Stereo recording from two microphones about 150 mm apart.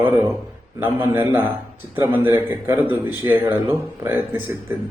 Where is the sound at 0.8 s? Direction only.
15° right (ahead or behind).